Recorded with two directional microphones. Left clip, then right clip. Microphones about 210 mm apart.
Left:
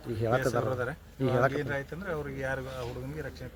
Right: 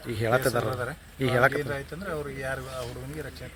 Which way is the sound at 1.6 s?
25° left (ahead or behind).